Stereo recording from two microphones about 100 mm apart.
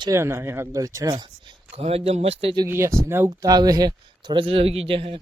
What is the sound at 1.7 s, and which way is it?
Speech, 85° right.